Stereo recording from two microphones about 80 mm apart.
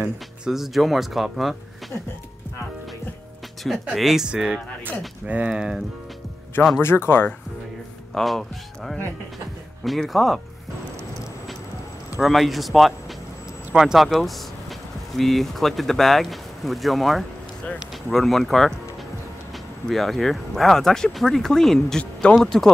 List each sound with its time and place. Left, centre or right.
0.5 s speech: centre
3.9 s speech: centre
6.8 s speech: left
8.1 s speech: centre
12.2 s speech: centre
19.9 s speech: centre